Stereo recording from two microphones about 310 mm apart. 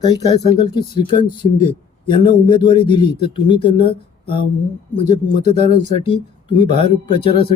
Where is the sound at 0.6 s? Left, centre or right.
Centre.